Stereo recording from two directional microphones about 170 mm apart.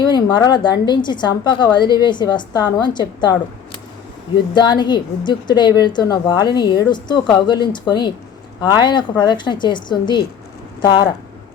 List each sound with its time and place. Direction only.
0.0 s a woman's voice: 25° left (ahead or behind)